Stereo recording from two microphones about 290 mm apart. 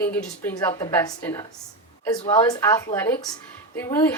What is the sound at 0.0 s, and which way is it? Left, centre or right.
A woman's voice, centre.